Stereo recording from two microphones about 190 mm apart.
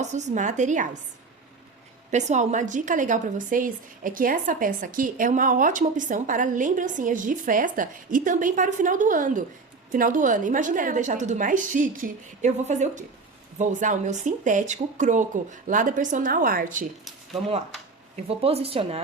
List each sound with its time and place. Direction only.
0.0 s speech: 40° right (ahead or behind)
2.0 s a woman's voice: 40° right (ahead or behind)
18.3 s speech: 30° right (ahead or behind)